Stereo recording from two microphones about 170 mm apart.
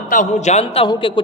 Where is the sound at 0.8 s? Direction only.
30° left (ahead or behind).